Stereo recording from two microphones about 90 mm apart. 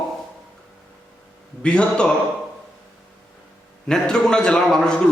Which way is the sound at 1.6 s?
10° left (ahead or behind).